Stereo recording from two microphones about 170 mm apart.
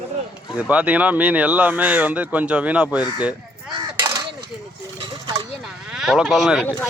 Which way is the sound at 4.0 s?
25° right (ahead or behind).